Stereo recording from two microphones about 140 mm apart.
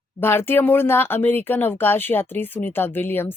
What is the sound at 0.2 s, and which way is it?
Speech, 15° left (ahead or behind).